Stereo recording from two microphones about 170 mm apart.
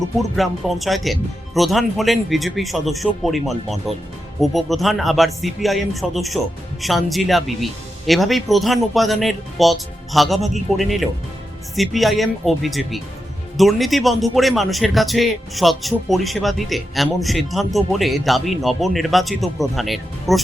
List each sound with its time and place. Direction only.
0.2 s speech: centre (ahead or behind)